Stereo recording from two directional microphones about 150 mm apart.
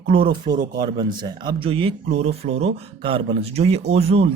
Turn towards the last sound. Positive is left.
turn(degrees=-40)  # may be behind; listen again after turning